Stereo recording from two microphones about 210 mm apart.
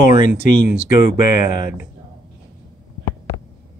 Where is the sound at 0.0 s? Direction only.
40° left (ahead or behind).